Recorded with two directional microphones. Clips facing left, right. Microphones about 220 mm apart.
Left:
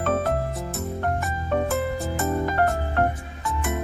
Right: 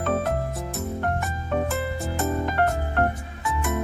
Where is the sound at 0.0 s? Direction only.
Centre (ahead or behind).